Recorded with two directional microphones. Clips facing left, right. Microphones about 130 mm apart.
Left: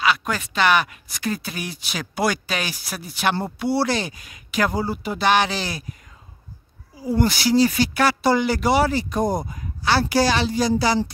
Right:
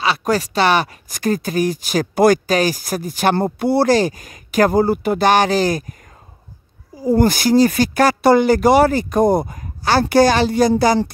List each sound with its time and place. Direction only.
0.0 s speech: 35° right (ahead or behind)
7.0 s speech: 45° right (ahead or behind)